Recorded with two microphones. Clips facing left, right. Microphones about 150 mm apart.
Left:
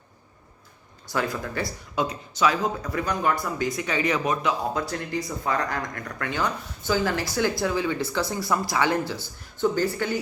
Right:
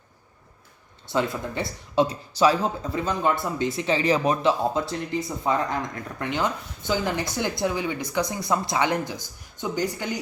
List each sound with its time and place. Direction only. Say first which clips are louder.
1.0 s speech: right 2 dB; 25° right (ahead or behind)